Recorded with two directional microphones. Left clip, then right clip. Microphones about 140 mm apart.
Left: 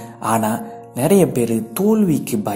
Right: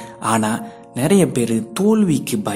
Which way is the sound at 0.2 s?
15° right (ahead or behind).